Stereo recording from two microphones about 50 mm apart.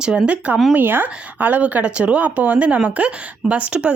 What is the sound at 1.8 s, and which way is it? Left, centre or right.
A woman's voice, right.